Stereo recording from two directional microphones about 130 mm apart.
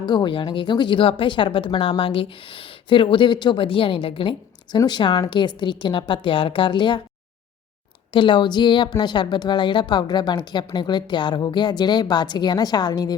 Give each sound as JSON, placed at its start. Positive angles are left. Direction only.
{"t": 0.0, "sound": "speech", "side_deg": 35}
{"t": 8.1, "sound": "speech", "side_deg": 40}